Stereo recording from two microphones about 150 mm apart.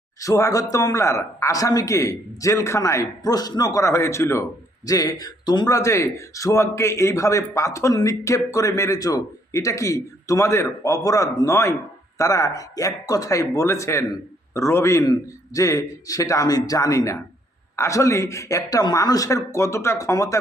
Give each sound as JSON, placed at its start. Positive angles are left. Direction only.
{"t": 0.2, "sound": "speech", "side_deg": 20}